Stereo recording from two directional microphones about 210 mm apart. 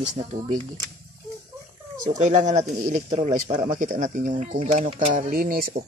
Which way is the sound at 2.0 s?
35° right (ahead or behind).